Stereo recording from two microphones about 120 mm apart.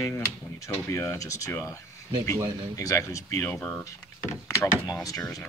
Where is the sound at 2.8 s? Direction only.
25° left (ahead or behind).